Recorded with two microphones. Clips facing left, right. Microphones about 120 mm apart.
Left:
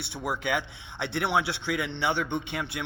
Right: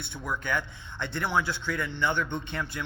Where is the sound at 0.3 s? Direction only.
70° left (ahead or behind).